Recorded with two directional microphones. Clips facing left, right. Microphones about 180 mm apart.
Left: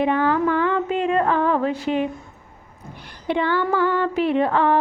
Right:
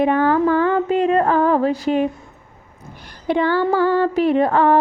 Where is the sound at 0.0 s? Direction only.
45° right (ahead or behind).